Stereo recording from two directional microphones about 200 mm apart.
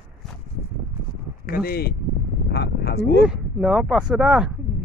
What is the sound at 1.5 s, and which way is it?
Speech, 50° left (ahead or behind).